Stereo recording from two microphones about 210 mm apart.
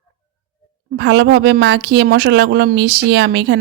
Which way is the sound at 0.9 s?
60° right (ahead or behind).